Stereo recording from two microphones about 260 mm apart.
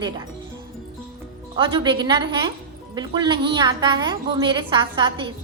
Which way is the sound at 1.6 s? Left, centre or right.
Centre.